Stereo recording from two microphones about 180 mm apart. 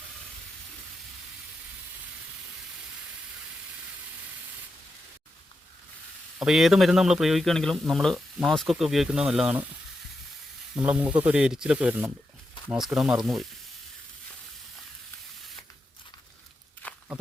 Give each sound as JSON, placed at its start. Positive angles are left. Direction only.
{"t": 6.4, "sound": "speech", "side_deg": 0}
{"t": 10.8, "sound": "speech", "side_deg": -5}
{"t": 16.8, "sound": "walk", "side_deg": 10}